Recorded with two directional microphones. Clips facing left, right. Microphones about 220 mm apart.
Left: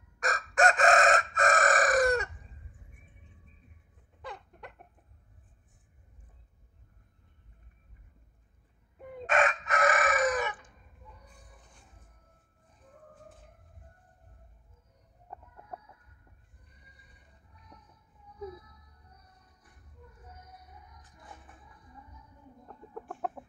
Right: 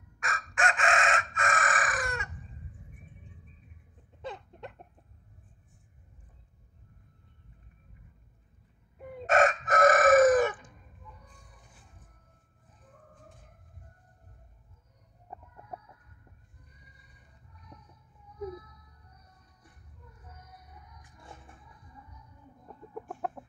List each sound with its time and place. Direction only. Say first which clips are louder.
0.2 s chicken: left 6 dB; 40° left (ahead or behind)
4.2 s a sound: right 4 dB; 25° right (ahead or behind)
9.3 s chicken: right 4 dB; 45° right (ahead or behind)
15.3 s chicken: right 1 dB; 10° right (ahead or behind)
22.9 s chicken: even; 5° right (ahead or behind)